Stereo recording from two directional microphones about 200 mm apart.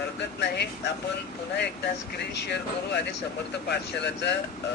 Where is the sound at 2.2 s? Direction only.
55° left (ahead or behind).